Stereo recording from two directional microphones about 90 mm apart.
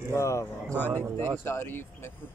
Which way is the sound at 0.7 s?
20° left (ahead or behind).